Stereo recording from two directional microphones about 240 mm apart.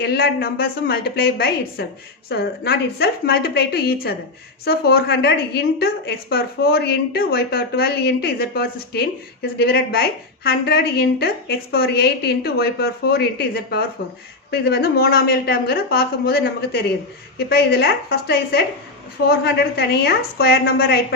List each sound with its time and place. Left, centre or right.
0.0 s a woman's voice: left